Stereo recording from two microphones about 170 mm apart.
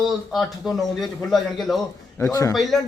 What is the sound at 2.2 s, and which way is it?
Speech, 20° left (ahead or behind).